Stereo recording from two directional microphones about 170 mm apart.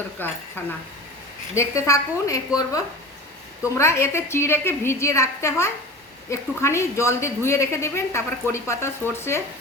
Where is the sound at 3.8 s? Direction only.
15° left (ahead or behind).